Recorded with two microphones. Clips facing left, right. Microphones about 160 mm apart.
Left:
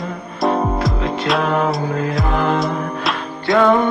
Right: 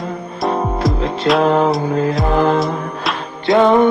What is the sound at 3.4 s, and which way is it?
Mantra, 25° right (ahead or behind).